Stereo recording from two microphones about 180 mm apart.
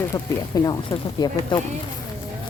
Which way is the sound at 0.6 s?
20° left (ahead or behind).